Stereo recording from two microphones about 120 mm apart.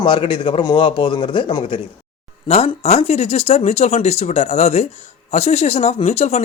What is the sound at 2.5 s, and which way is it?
Speech, 60° left (ahead or behind).